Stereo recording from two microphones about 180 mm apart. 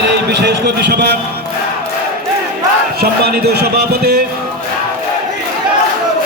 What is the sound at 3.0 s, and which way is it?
Speech, 60° right (ahead or behind).